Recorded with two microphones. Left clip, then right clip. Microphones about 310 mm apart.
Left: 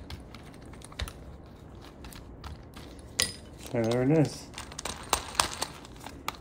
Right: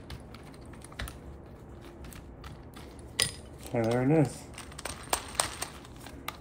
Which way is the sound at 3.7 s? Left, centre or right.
Centre.